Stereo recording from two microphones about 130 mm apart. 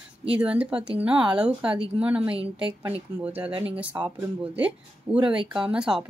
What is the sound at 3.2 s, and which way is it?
Speech, 10° right (ahead or behind).